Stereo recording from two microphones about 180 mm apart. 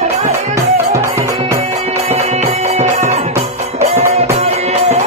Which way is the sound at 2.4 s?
40° right (ahead or behind).